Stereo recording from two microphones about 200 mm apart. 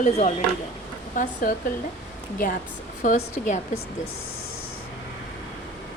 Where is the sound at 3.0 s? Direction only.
40° left (ahead or behind).